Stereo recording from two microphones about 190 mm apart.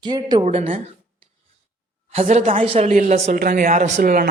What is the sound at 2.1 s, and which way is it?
Speech, 40° right (ahead or behind).